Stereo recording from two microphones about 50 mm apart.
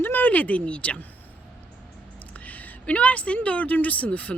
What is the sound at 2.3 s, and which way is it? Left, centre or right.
A woman's voice, left.